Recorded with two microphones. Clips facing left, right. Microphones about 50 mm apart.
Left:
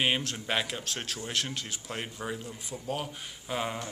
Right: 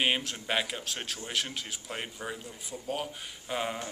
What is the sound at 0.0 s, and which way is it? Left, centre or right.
Speech, centre.